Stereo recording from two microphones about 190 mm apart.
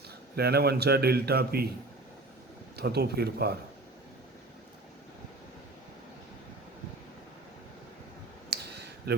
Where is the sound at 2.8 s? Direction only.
60° right (ahead or behind).